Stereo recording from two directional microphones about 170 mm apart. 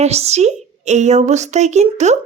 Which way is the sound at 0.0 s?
40° right (ahead or behind).